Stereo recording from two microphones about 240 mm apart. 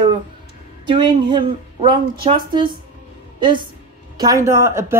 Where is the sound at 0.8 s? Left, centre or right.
Centre.